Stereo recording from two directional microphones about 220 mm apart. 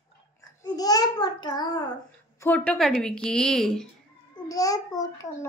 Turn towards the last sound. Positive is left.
turn(degrees=15)  # may be behind; listen again after turning